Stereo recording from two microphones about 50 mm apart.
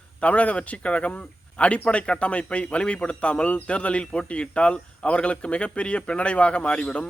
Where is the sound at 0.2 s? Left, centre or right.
Left.